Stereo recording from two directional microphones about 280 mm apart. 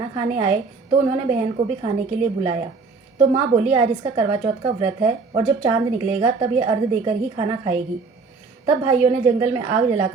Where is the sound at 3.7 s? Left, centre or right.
Centre.